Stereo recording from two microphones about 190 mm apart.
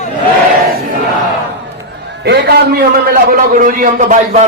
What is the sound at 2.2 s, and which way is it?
A man's voice, 55° right (ahead or behind).